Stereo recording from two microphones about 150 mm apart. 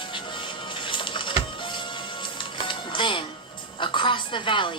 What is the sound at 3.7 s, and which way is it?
A woman's voice, 30° left (ahead or behind).